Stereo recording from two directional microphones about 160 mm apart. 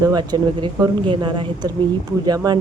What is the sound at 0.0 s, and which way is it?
Speech, 25° right (ahead or behind).